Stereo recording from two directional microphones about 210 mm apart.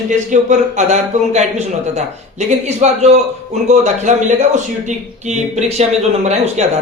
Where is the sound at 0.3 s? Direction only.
35° right (ahead or behind).